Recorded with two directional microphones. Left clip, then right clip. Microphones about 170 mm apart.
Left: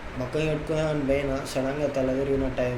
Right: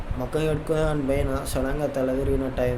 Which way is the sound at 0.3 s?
25° right (ahead or behind).